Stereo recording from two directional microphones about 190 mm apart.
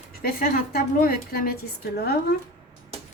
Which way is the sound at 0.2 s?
50° left (ahead or behind).